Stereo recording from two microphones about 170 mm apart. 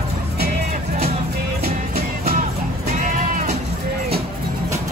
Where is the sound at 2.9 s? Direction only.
50° right (ahead or behind).